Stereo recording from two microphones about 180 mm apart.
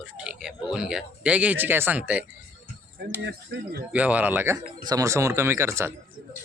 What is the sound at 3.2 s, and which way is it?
Speech, 70° right (ahead or behind).